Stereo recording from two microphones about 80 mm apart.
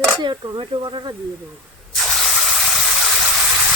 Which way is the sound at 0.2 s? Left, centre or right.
Right.